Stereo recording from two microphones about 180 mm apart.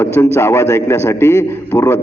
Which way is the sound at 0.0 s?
15° left (ahead or behind).